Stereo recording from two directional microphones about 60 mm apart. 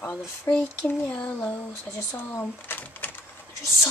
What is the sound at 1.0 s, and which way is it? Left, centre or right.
Speech, left.